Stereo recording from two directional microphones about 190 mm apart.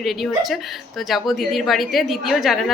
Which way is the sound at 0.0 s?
Centre (ahead or behind).